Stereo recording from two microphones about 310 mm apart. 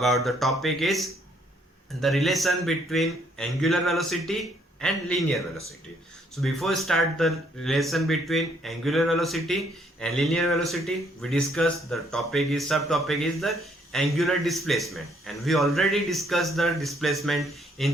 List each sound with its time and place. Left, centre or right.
0.0 s speech: centre